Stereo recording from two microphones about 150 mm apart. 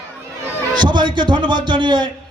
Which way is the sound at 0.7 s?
30° right (ahead or behind).